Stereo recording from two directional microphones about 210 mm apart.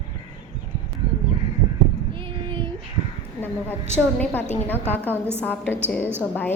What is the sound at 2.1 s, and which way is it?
Child singing, 25° right (ahead or behind).